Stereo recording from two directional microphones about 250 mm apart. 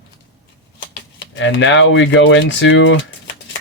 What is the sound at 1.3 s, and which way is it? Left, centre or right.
Speech, left.